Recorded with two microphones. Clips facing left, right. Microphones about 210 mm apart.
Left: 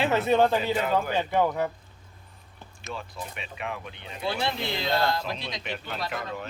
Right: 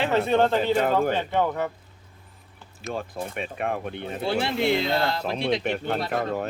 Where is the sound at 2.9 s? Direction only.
50° right (ahead or behind).